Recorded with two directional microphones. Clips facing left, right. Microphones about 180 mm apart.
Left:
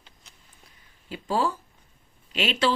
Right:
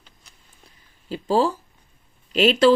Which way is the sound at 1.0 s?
35° right (ahead or behind).